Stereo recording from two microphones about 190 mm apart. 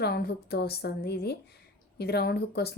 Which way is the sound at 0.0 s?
55° left (ahead or behind).